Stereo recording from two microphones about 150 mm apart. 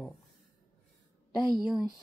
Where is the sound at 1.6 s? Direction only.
25° left (ahead or behind).